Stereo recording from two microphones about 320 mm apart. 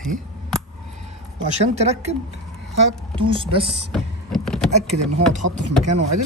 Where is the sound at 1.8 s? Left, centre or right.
Centre.